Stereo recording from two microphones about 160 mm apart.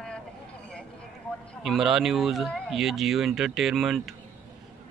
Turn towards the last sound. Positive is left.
turn(degrees=0)  # may be behind; listen again after turning